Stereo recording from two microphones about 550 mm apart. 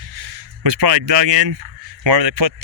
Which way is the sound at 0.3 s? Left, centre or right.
Right.